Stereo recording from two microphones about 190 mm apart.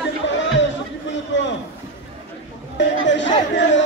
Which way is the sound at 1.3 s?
70° left (ahead or behind).